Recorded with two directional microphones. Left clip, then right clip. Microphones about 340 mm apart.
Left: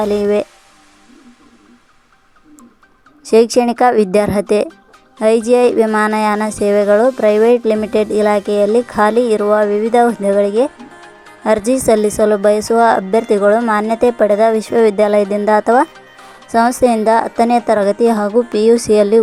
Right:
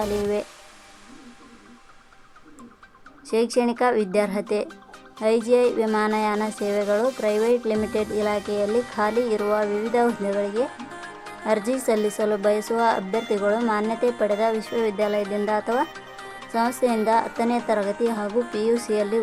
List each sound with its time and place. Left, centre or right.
0.0 s speech: centre
3.2 s a woman's voice: left
11.7 s a woman's voice: centre